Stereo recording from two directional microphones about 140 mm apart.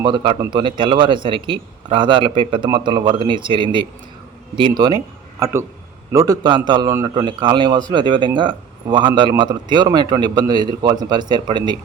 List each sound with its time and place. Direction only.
0.0 s a man's voice: 35° right (ahead or behind)